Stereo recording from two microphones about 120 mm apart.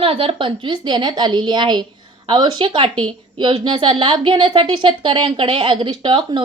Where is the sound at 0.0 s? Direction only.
50° right (ahead or behind).